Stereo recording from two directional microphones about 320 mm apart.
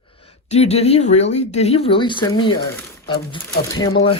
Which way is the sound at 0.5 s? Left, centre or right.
Centre.